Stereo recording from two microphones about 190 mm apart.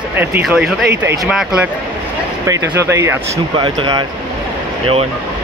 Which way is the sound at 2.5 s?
15° right (ahead or behind).